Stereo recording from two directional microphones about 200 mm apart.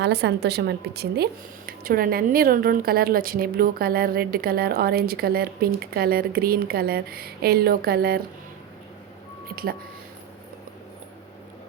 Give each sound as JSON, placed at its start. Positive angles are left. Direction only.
{"t": 0.0, "sound": "a woman's voice", "side_deg": -55}
{"t": 9.5, "sound": "speech", "side_deg": -50}